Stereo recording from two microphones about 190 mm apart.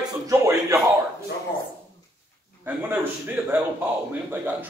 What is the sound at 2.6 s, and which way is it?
Speech, 10° right (ahead or behind).